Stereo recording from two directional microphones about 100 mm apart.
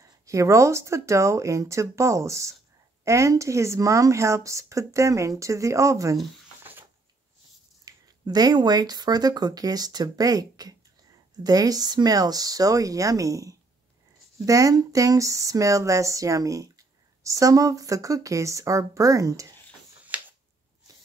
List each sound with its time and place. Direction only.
0.0 s speech: 30° right (ahead or behind)
6.6 s a sound: 20° right (ahead or behind)
7.8 s speech: 40° right (ahead or behind)